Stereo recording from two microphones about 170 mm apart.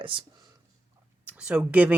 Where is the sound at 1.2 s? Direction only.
5° right (ahead or behind).